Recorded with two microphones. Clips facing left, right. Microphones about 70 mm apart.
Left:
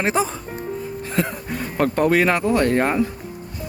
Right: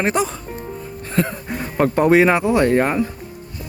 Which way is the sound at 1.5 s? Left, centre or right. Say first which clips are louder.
Right 3 dB; centre.